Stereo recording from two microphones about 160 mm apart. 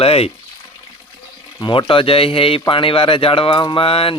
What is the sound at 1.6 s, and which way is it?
A man's voice, 30° left (ahead or behind).